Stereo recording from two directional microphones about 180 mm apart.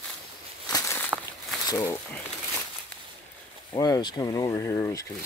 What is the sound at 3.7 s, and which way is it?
Speech, 20° left (ahead or behind).